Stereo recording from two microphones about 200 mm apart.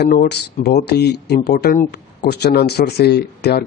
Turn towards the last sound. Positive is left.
turn(degrees=55)  # may be behind; listen again after turning